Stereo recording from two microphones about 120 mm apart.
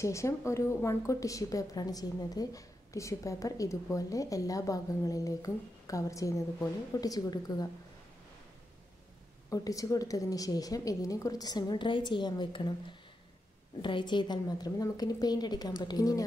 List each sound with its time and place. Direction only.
0.0 s a woman's voice: 25° left (ahead or behind)
9.5 s a woman's voice: 30° left (ahead or behind)
13.7 s a woman's voice: 40° left (ahead or behind)